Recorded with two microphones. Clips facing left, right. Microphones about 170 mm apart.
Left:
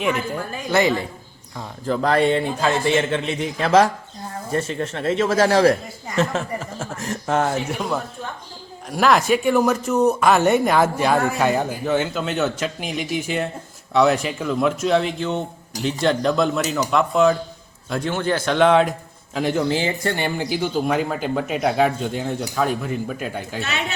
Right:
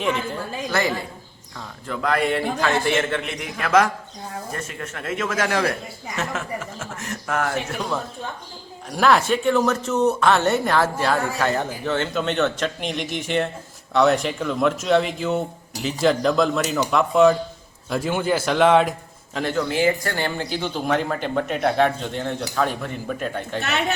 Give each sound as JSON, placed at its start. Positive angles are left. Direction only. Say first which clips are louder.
{"t": 0.7, "sound": "a man's voice", "louder": "left 5 dB", "side_deg": 20}
{"t": 1.9, "sound": "a man's voice", "louder": "left 4 dB", "side_deg": 35}
{"t": 8.9, "sound": "a man's voice", "louder": "left 1 dB", "side_deg": 5}
{"t": 19.7, "sound": "speech", "louder": "right 1 dB", "side_deg": 25}
{"t": 23.6, "sound": "a woman's voice", "louder": "right 3 dB", "side_deg": -60}